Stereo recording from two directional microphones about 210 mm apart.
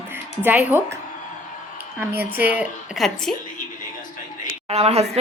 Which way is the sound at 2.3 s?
10° right (ahead or behind).